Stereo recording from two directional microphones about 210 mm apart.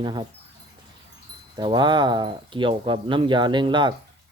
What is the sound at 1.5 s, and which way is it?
Speech, 20° right (ahead or behind).